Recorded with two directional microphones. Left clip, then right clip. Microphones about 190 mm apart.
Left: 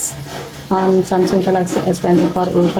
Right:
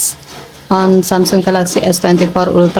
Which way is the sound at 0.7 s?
35° right (ahead or behind).